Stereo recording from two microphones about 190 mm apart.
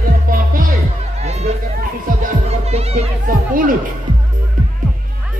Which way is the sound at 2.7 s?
35° right (ahead or behind).